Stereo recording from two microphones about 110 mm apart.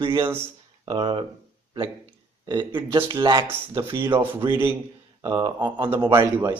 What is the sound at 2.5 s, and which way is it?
Speech, 45° right (ahead or behind).